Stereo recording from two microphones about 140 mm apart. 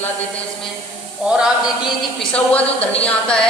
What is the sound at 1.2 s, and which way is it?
Speech, 5° right (ahead or behind).